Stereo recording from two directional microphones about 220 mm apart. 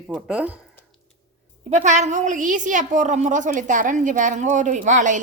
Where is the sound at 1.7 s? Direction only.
35° right (ahead or behind).